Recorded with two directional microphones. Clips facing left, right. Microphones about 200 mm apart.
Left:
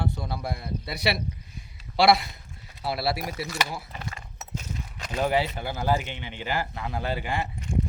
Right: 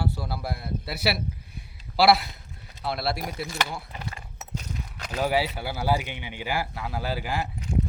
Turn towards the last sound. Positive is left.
turn(degrees=-5)  # may be behind; listen again after turning